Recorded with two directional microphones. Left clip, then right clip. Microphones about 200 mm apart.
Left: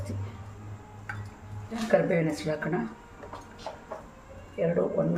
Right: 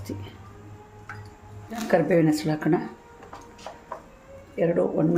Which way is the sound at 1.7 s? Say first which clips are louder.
Right 3 dB; 55° right (ahead or behind).